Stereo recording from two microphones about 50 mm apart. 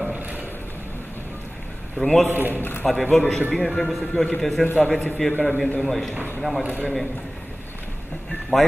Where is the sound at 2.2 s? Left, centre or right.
Right.